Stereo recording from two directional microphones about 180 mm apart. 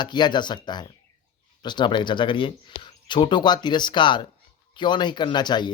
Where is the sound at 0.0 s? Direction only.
25° left (ahead or behind).